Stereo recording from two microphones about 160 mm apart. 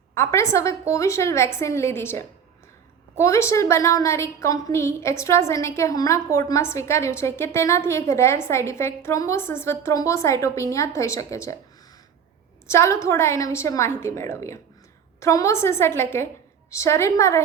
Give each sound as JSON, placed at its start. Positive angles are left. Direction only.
{"t": 0.1, "sound": "a woman's voice", "side_deg": 15}
{"t": 12.6, "sound": "a woman's voice", "side_deg": 15}